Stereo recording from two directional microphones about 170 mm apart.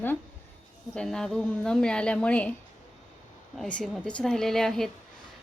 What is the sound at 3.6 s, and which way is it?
A woman's voice, 5° left (ahead or behind).